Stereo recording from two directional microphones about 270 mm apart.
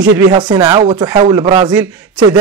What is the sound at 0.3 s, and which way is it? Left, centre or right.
Speech, centre.